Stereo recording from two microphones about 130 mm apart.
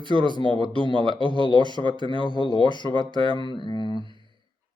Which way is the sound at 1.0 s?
35° left (ahead or behind).